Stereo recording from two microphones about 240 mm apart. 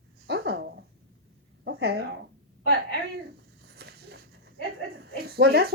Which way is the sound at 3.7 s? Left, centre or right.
Right.